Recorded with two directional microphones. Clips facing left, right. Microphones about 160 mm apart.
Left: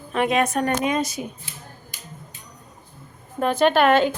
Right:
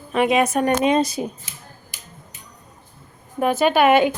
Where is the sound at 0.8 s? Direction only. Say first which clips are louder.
Right 5 dB; 25° right (ahead or behind).